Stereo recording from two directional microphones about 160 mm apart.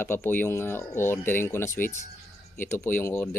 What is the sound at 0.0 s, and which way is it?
Speech, 15° left (ahead or behind).